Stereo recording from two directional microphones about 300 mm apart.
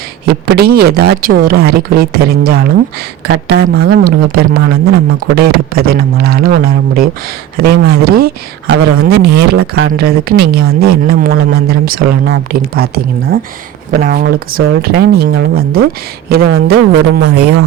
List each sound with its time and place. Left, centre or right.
0.3 s speech: right